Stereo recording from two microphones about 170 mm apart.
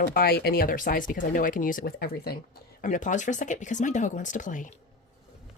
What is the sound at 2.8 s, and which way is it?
A woman's voice, 50° left (ahead or behind).